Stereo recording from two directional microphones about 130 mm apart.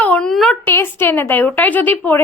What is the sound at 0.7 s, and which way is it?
Speech, 15° left (ahead or behind).